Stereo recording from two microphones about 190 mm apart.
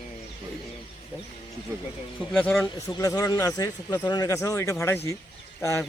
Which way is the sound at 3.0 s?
20° left (ahead or behind).